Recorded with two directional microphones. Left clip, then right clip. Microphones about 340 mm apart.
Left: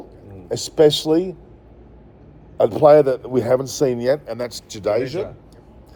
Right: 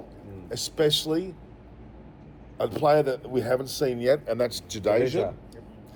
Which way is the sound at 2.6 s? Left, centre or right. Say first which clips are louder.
Left 10 dB; left.